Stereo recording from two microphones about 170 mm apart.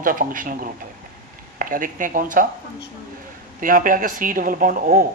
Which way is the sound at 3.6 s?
55° right (ahead or behind).